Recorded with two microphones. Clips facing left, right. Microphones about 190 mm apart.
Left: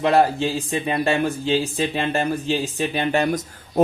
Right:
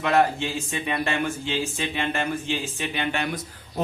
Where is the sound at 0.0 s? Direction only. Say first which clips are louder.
Left 4 dB; 35° left (ahead or behind).